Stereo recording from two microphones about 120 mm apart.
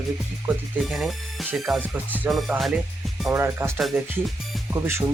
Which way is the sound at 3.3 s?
20° right (ahead or behind).